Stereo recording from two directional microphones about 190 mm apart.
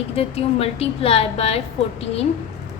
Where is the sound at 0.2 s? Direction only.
30° left (ahead or behind).